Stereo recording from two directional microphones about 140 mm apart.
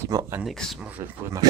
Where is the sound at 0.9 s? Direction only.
15° right (ahead or behind).